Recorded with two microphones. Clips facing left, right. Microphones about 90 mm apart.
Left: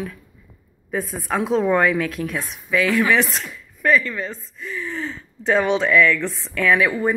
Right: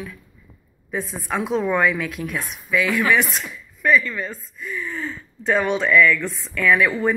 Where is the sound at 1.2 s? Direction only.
40° left (ahead or behind); by 6.5 s 20° left (ahead or behind).